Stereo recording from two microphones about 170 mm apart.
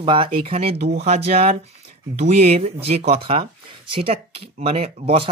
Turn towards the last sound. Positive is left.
turn(degrees=-35)  # may be behind; listen again after turning